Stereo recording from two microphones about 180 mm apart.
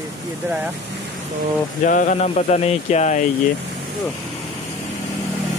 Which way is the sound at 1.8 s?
45° left (ahead or behind).